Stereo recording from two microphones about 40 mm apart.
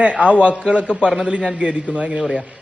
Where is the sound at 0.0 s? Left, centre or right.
Right.